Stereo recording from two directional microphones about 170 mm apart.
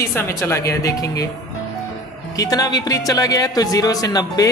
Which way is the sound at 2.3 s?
20° left (ahead or behind).